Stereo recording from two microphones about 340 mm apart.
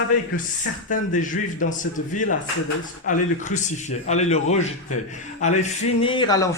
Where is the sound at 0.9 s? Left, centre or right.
Left.